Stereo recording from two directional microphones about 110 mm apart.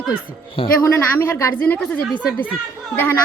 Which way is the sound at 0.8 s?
25° left (ahead or behind).